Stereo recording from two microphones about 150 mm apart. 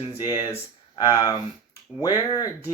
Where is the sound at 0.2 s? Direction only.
25° left (ahead or behind).